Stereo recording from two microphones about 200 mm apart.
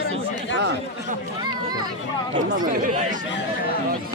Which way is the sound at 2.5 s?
40° right (ahead or behind).